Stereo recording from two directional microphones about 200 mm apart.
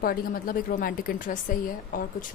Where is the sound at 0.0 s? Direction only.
45° left (ahead or behind).